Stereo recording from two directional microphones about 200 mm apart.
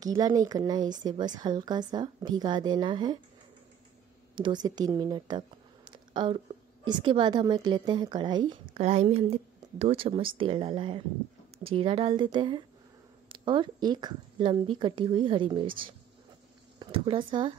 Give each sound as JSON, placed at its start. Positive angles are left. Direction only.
{"t": 0.0, "sound": "a woman's voice", "side_deg": -20}
{"t": 4.4, "sound": "a woman's voice", "side_deg": -20}
{"t": 8.7, "sound": "a woman's voice", "side_deg": -35}
{"t": 16.8, "sound": "a woman's voice", "side_deg": -25}